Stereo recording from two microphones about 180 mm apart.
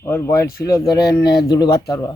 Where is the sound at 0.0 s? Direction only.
15° left (ahead or behind).